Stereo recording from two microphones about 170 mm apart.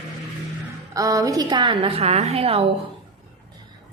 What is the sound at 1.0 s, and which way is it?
A woman's voice, 20° right (ahead or behind).